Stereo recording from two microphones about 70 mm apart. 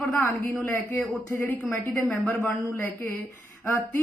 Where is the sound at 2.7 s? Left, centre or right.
Left.